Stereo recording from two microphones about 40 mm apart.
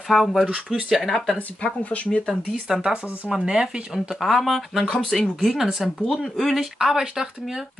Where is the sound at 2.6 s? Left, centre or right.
Centre.